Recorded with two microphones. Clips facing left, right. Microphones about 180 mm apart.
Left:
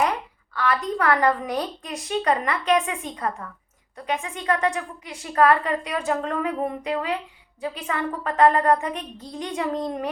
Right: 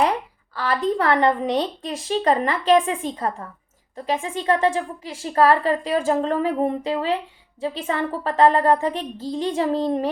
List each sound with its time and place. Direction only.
0.5 s a woman's voice: 30° right (ahead or behind)